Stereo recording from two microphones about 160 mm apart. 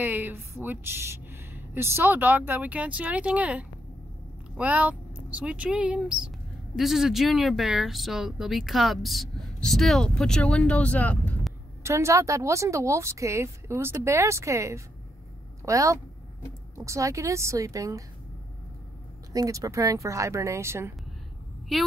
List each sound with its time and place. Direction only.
0.0 s speech: 10° right (ahead or behind); by 11.3 s 10° left (ahead or behind)
11.8 s speech: 20° right (ahead or behind)
19.3 s speech: 20° right (ahead or behind)
21.7 s speech: centre (ahead or behind)